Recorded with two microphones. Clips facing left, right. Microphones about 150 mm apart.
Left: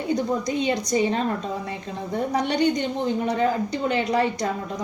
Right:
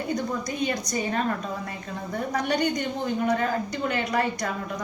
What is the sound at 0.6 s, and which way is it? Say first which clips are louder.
Speech: left 4 dB; 25° left (ahead or behind).